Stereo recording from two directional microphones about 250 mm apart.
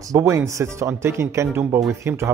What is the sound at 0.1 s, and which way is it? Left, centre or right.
Speech, centre.